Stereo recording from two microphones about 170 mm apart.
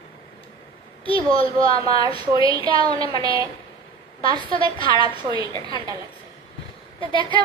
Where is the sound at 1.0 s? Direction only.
35° left (ahead or behind).